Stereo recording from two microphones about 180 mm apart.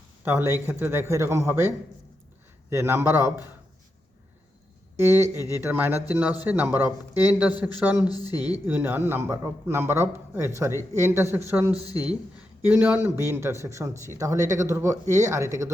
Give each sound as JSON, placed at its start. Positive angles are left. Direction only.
{"t": 0.3, "sound": "speech", "side_deg": -10}
{"t": 4.9, "sound": "speech", "side_deg": -15}
{"t": 8.0, "sound": "speech", "side_deg": 20}
{"t": 8.6, "sound": "speech", "side_deg": -10}